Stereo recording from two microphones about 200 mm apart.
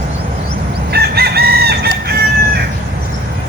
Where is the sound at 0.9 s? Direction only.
50° right (ahead or behind).